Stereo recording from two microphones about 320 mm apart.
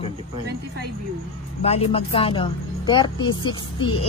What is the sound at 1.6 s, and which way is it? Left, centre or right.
A woman's voice, centre.